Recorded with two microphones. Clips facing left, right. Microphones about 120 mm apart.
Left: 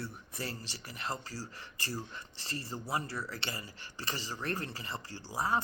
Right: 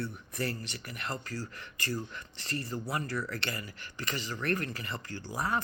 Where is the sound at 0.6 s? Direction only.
25° left (ahead or behind).